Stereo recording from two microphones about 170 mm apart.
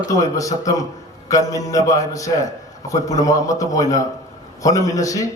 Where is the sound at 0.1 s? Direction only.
20° left (ahead or behind).